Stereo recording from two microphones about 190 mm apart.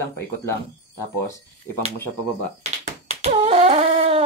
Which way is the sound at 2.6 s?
35° right (ahead or behind).